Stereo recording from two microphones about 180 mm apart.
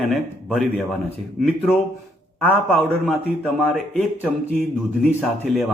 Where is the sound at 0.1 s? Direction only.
Centre (ahead or behind).